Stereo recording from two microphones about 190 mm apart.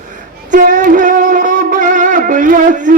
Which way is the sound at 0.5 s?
45° right (ahead or behind).